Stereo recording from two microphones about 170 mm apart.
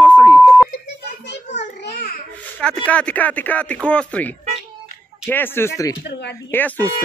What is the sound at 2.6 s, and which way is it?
Speech, 5° left (ahead or behind).